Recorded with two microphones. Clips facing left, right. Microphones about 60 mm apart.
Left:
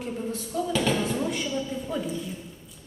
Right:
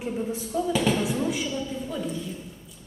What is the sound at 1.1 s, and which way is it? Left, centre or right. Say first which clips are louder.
Speech: right 1 dB; centre.